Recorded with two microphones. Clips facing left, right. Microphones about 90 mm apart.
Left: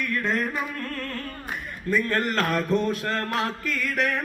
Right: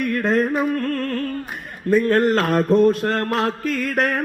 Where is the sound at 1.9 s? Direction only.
45° right (ahead or behind).